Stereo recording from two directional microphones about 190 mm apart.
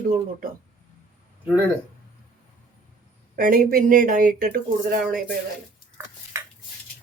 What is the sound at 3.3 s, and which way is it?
Speech, 45° right (ahead or behind).